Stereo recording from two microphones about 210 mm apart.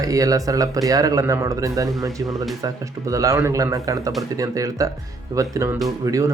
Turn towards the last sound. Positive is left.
turn(degrees=-15)  # may be behind; listen again after turning